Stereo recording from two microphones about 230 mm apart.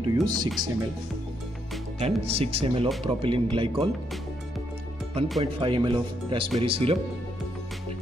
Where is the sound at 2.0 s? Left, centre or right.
Right.